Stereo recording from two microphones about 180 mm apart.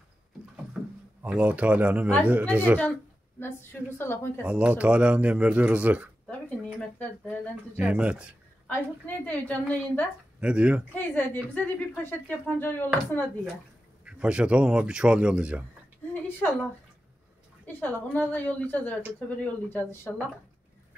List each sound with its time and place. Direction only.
0.8 s a sound: 5° right (ahead or behind)
1.2 s speech: 10° right (ahead or behind)
3.3 s speech: 15° left (ahead or behind)
4.4 s speech: 5° right (ahead or behind)
6.2 s a sound: 5° left (ahead or behind)
7.7 s speech: 5° right (ahead or behind)
8.6 s speech: 10° left (ahead or behind)
10.4 s speech: 5° right (ahead or behind)
11.0 s speech: 10° left (ahead or behind)
14.0 s speech: 5° right (ahead or behind)
16.1 s a sound: 10° left (ahead or behind)
17.7 s speech: 10° left (ahead or behind)